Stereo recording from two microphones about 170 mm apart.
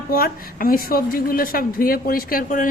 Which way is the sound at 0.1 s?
60° left (ahead or behind).